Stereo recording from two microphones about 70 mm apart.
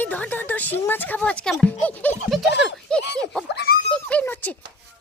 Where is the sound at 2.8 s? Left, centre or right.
Centre.